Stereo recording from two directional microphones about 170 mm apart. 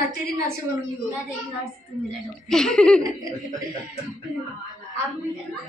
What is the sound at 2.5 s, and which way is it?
Speech, 5° left (ahead or behind).